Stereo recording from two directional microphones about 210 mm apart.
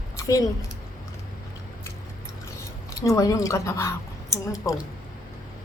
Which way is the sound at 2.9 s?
15° left (ahead or behind).